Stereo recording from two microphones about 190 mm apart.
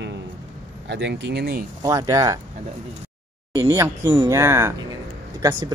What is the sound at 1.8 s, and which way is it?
Speech, 15° right (ahead or behind).